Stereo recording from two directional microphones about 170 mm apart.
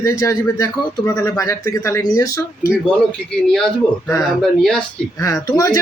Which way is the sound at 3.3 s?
5° left (ahead or behind).